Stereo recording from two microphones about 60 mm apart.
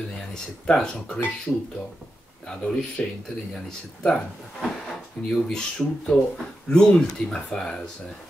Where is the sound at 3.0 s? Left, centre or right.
Centre.